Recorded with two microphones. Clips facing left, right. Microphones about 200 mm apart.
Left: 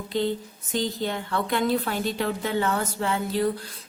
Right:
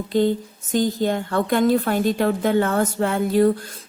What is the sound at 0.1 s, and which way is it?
A woman's voice, 45° right (ahead or behind).